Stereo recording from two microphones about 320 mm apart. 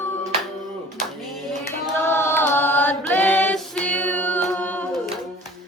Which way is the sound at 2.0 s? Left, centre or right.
Centre.